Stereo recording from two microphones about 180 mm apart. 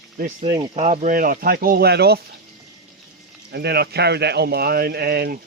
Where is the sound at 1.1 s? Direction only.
50° right (ahead or behind).